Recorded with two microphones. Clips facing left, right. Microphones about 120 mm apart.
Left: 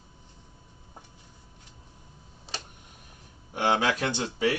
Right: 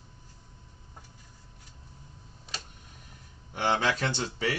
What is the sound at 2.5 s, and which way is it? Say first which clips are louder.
Tick-tock: left 3 dB; 30° left (ahead or behind).